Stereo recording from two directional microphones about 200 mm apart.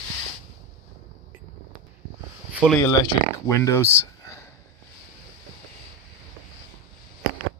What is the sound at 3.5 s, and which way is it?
Speech, 15° left (ahead or behind).